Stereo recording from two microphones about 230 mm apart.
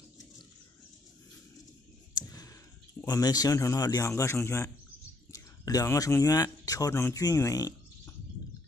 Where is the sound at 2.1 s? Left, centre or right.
Centre.